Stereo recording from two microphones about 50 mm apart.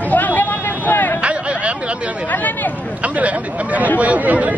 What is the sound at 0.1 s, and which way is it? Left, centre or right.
Vehicle, left.